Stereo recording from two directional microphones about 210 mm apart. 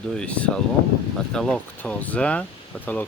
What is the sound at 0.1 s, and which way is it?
Speech, 5° left (ahead or behind).